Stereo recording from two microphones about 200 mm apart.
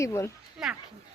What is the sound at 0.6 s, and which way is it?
Speech, centre (ahead or behind).